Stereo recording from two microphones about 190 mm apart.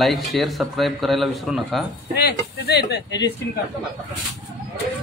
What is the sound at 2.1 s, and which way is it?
Speech, 60° left (ahead or behind).